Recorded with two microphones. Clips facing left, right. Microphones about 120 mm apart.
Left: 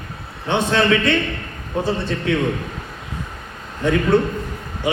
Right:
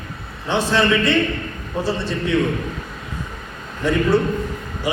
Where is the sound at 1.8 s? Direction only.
55° left (ahead or behind).